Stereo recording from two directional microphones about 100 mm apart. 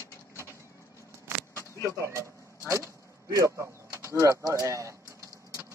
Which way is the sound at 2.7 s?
30° right (ahead or behind).